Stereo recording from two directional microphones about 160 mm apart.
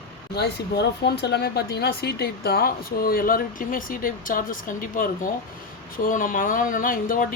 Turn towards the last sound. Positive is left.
turn(degrees=60)  # may be behind; listen again after turning